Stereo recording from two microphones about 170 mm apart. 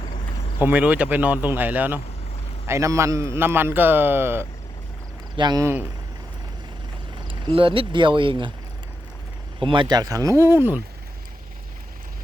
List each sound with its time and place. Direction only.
0.6 s a man's voice: 10° right (ahead or behind)
7.3 s speech: 30° right (ahead or behind)
9.6 s speech: 30° right (ahead or behind); by 10.8 s 10° right (ahead or behind)